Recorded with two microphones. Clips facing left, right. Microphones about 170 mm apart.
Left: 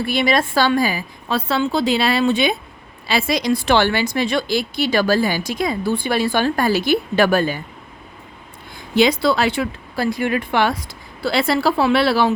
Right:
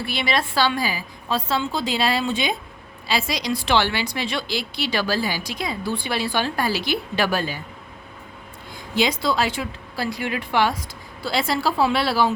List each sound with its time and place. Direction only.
0.0 s a woman's voice: 45° left (ahead or behind)
9.0 s speech: 65° left (ahead or behind)